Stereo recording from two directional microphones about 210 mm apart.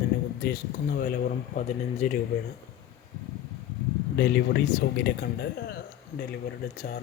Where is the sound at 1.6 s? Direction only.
30° left (ahead or behind).